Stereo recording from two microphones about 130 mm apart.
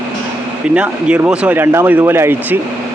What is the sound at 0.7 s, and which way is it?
Speech, 10° right (ahead or behind).